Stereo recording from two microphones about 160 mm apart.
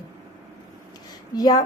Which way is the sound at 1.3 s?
25° left (ahead or behind).